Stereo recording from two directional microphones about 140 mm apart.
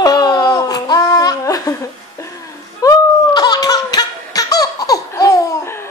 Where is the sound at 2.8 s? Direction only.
30° left (ahead or behind).